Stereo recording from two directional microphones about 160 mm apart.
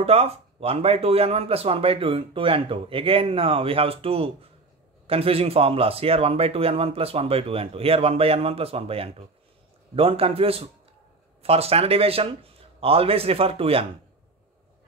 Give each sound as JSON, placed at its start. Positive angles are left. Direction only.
{"t": 0.0, "sound": "a man's voice", "side_deg": -40}